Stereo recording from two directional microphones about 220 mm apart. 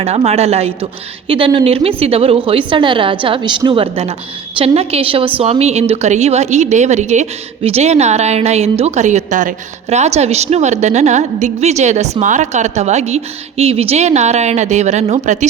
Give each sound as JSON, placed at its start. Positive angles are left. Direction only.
{"t": 0.0, "sound": "a woman's voice", "side_deg": -30}